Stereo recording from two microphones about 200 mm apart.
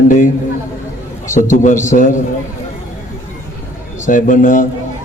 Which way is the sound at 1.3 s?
40° left (ahead or behind).